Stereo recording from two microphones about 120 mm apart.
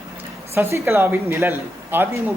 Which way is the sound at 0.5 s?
20° right (ahead or behind).